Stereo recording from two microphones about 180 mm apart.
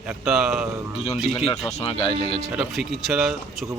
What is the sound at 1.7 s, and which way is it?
Speech, 35° left (ahead or behind).